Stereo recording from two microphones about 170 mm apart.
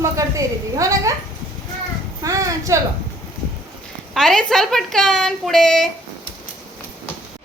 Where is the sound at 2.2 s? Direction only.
20° right (ahead or behind).